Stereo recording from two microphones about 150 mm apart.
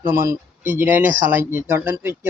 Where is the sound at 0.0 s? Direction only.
20° right (ahead or behind).